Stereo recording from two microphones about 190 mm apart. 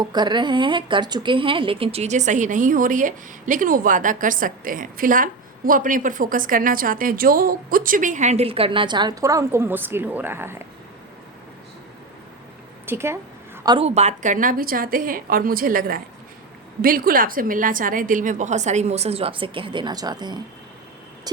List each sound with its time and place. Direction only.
0.0 s a woman's voice: 20° right (ahead or behind)
12.8 s a woman's voice: 10° right (ahead or behind)
13.7 s a woman's voice: 30° right (ahead or behind)